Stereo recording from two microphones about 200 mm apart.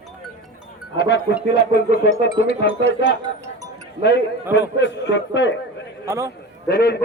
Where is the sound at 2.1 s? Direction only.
30° right (ahead or behind).